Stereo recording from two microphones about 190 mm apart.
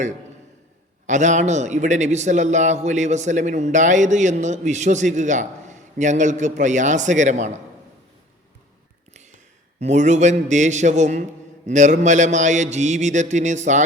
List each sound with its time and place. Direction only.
1.0 s a man's voice: 40° right (ahead or behind)
9.8 s a man's voice: 40° right (ahead or behind)